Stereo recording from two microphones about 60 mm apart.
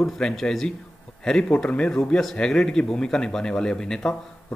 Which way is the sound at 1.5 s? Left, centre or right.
Centre.